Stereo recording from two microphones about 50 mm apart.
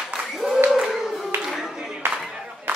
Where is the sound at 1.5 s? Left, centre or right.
Centre.